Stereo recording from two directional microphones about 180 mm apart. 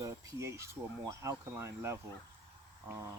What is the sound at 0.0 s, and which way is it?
Speech, 15° right (ahead or behind).